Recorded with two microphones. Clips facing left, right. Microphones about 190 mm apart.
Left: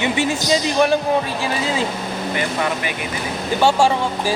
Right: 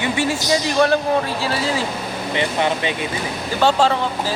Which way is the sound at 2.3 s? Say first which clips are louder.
Right 3 dB; 25° right (ahead or behind).